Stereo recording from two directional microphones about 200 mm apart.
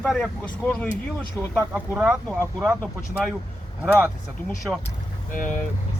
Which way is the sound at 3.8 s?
10° right (ahead or behind).